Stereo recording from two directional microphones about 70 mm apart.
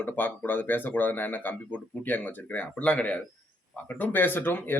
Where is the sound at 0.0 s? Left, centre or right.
Left.